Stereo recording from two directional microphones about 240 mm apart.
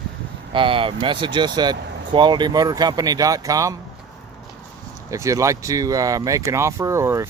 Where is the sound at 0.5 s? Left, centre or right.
Right.